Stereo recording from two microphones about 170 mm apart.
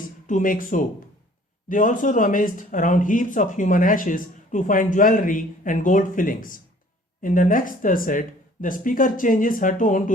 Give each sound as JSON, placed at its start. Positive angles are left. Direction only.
{"t": 0.3, "sound": "speech", "side_deg": 50}